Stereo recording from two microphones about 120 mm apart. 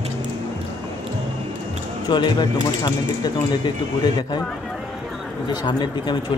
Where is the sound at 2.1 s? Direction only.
40° left (ahead or behind).